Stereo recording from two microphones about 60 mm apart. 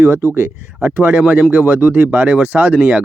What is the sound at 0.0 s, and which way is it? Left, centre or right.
Speech, right.